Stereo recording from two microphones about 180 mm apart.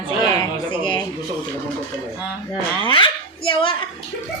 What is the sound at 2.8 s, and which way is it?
Speech, 30° left (ahead or behind).